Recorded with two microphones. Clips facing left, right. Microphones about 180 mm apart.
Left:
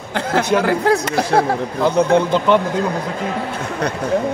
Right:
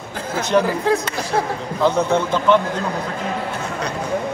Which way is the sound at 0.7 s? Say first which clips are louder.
Left 3 dB; 75° left (ahead or behind).